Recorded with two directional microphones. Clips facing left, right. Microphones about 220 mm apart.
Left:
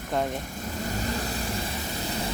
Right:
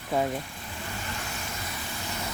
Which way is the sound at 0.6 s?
40° left (ahead or behind).